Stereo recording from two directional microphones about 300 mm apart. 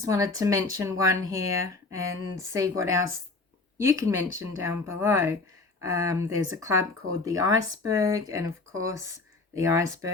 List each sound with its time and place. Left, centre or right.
0.0 s speech: centre
1.4 s speech: right
1.6 s speech: centre